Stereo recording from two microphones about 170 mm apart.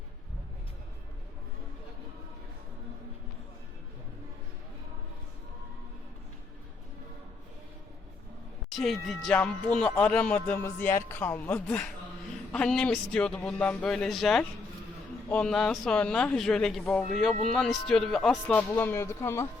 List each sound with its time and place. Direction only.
8.7 s speech: centre (ahead or behind)